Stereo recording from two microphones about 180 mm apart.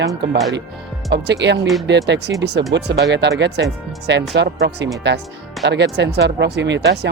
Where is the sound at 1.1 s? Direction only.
70° right (ahead or behind).